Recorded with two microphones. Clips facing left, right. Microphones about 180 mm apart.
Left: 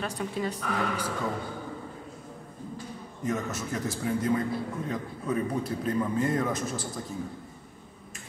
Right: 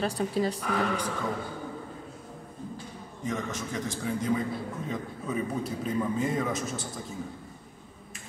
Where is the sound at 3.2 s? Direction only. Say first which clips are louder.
Left 2 dB; 5° left (ahead or behind).